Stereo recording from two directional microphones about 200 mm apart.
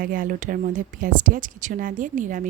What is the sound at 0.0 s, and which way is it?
A woman's voice, 45° right (ahead or behind).